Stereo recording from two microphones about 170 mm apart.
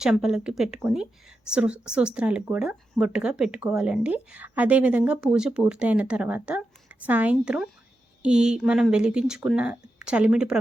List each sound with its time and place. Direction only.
0.0 s speech: 5° right (ahead or behind)